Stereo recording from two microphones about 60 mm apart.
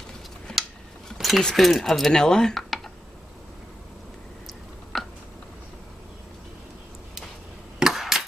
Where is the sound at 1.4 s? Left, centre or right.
Centre.